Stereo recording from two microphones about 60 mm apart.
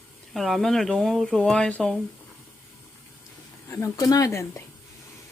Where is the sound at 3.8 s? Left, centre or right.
Left.